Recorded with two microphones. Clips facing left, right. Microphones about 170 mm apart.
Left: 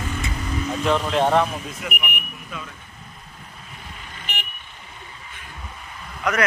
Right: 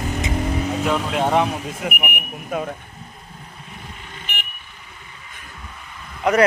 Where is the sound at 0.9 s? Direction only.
10° right (ahead or behind).